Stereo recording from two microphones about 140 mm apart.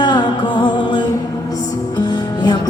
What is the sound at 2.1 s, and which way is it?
Music, 30° left (ahead or behind).